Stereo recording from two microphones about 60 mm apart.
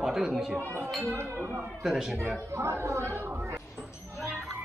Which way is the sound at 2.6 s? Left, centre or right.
Right.